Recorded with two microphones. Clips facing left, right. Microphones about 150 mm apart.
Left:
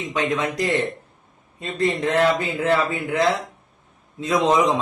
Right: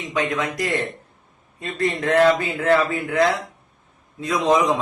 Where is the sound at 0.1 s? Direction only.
25° left (ahead or behind).